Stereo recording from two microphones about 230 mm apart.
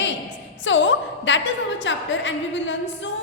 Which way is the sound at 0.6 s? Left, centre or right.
Left.